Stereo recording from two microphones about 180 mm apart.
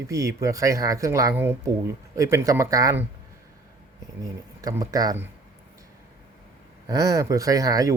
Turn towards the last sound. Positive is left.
turn(degrees=-20)  # may be behind; listen again after turning